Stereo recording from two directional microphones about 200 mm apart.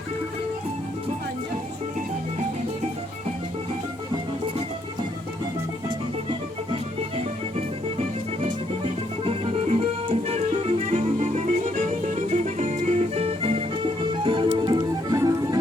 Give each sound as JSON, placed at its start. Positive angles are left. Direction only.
{"t": 8.4, "sound": "music", "side_deg": -25}